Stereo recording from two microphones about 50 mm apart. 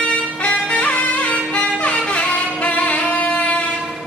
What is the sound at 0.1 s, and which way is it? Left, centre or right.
Music, left.